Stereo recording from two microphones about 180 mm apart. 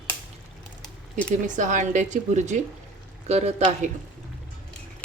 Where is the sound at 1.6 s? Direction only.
45° right (ahead or behind).